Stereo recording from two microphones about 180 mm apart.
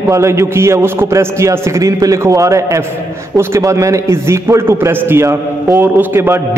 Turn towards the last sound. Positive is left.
turn(degrees=-15)  # may be behind; listen again after turning